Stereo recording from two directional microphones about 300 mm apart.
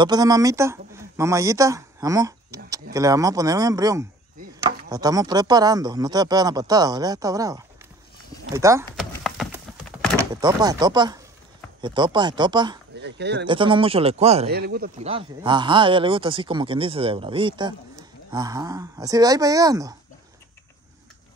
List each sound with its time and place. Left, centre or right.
0.0 s speech: centre
9.1 s a sound: centre
10.3 s speech: centre
12.9 s speech: right
13.5 s speech: centre
14.5 s speech: right; by 20.0 s centre